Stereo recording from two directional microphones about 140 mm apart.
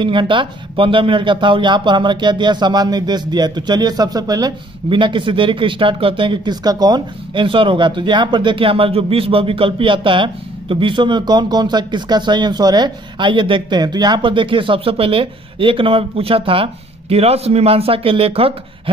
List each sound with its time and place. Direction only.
0.0 s speech: 35° right (ahead or behind)